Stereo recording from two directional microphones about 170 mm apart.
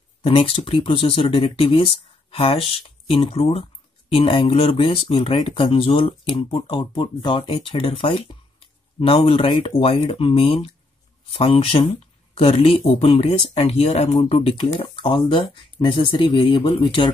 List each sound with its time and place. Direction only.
0.2 s speech: 35° left (ahead or behind)